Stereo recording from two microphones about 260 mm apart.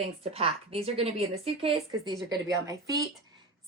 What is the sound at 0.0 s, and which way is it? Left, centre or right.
A woman's voice, right.